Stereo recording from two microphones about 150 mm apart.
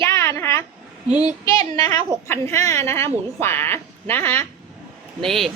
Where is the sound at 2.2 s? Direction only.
20° left (ahead or behind).